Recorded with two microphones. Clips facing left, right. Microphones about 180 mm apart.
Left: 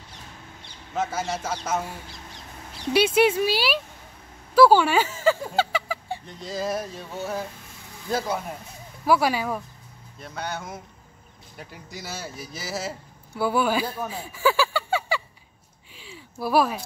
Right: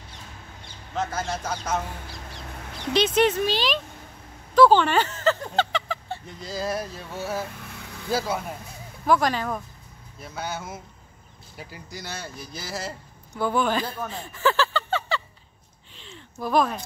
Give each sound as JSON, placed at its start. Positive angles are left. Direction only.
{"t": 0.9, "sound": "speech", "side_deg": 5}
{"t": 2.9, "sound": "speech", "side_deg": 10}
{"t": 4.6, "sound": "a sound", "side_deg": 10}
{"t": 6.2, "sound": "speech", "side_deg": 0}
{"t": 7.6, "sound": "vehicle", "side_deg": -70}
{"t": 8.1, "sound": "speech", "side_deg": -5}
{"t": 9.0, "sound": "speech", "side_deg": 10}
{"t": 10.2, "sound": "speech", "side_deg": -5}
{"t": 15.9, "sound": "a sound", "side_deg": 10}